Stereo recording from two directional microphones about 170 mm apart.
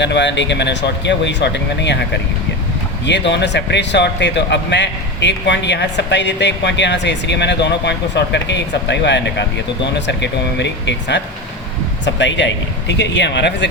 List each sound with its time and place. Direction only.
0.0 s speech: 90° left
3.1 s speech: 90° left